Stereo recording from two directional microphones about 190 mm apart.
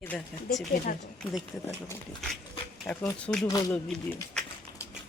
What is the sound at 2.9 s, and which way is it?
Speech, centre (ahead or behind).